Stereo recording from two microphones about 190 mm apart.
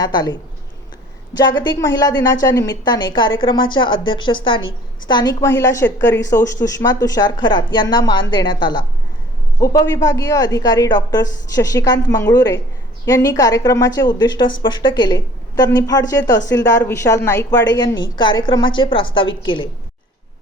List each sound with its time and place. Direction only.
0.0 s a woman's voice: 20° left (ahead or behind)
1.4 s a woman's voice: 20° left (ahead or behind)